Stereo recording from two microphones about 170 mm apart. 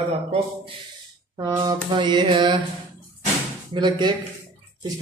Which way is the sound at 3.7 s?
25° right (ahead or behind).